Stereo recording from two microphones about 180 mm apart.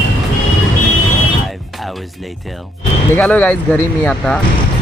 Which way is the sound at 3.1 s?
10° left (ahead or behind).